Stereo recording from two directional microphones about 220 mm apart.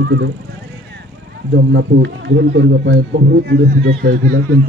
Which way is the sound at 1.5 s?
50° right (ahead or behind).